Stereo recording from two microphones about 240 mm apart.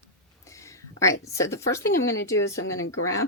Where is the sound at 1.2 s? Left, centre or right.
Centre.